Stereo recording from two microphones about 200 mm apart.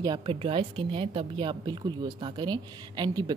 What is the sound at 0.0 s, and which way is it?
A woman's voice, 25° right (ahead or behind).